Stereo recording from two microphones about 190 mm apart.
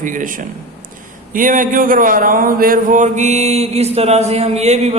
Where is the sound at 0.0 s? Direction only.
45° right (ahead or behind).